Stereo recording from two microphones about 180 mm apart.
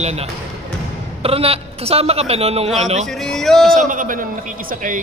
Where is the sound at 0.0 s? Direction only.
35° right (ahead or behind).